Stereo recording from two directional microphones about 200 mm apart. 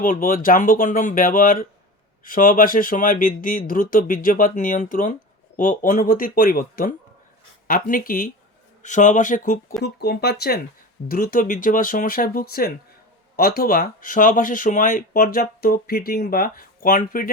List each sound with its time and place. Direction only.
0.0 s speech: 45° left (ahead or behind)
9.8 s speech: 55° left (ahead or behind)